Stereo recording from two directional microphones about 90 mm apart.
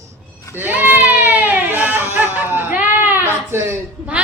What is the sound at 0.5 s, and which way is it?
Baby cry, 20° right (ahead or behind).